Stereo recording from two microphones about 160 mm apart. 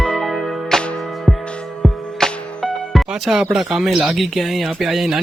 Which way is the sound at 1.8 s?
Centre (ahead or behind).